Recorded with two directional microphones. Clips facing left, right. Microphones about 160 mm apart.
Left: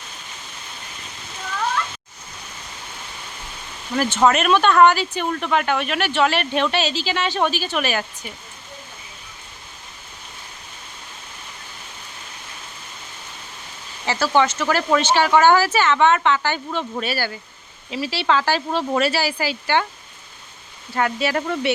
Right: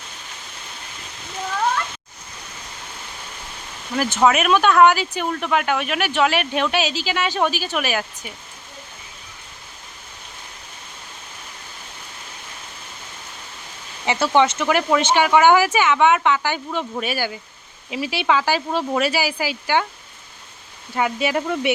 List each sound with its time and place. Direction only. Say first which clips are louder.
3.9 s speech: even; 10° right (ahead or behind)
14.0 s speech: right 1 dB; 20° right (ahead or behind)
21.2 s speech: right 1 dB; 15° right (ahead or behind)